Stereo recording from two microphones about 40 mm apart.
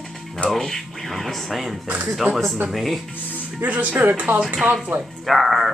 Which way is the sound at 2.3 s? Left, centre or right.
Right.